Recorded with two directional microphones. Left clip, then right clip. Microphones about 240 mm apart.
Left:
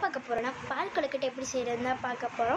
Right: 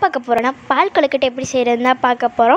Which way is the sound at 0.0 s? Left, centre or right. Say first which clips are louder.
Right 16 dB; right.